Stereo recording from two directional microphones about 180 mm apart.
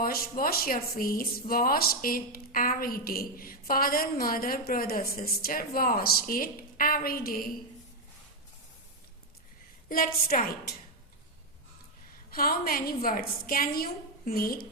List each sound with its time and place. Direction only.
0.0 s a woman's voice: 55° left (ahead or behind)
9.9 s a woman's voice: 55° left (ahead or behind)
12.3 s a woman's voice: 55° left (ahead or behind)